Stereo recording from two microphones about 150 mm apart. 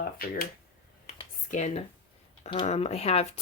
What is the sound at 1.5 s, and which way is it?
Speech, 50° left (ahead or behind).